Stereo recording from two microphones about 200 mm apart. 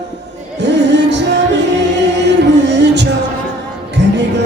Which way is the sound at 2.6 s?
60° right (ahead or behind).